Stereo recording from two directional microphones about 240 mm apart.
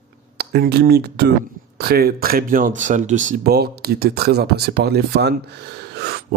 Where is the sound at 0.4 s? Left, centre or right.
Right.